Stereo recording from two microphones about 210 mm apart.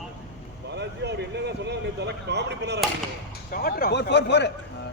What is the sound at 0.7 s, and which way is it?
Speech, 55° right (ahead or behind).